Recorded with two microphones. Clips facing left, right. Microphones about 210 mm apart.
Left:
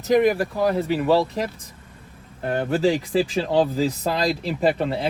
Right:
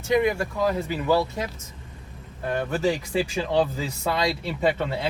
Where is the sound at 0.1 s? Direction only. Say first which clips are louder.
Left 4 dB; 35° left (ahead or behind).